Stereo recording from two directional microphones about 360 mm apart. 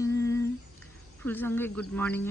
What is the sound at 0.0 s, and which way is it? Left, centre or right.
Humming, centre.